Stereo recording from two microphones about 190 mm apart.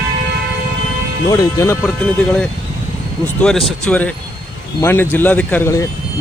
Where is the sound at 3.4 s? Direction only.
Centre (ahead or behind).